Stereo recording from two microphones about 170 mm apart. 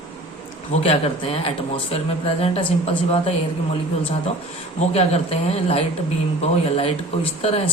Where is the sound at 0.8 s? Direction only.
35° left (ahead or behind).